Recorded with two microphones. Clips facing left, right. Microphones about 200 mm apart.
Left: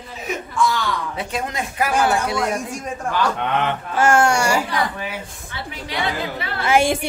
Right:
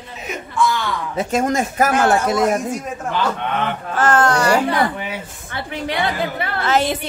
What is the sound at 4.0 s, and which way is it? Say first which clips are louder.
Speech: even; 10° left (ahead or behind).